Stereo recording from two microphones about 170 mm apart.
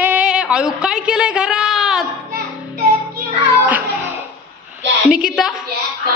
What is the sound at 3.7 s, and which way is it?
Music, 10° right (ahead or behind).